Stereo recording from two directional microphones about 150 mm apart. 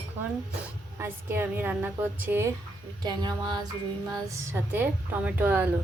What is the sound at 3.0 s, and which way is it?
A woman's voice, 30° right (ahead or behind).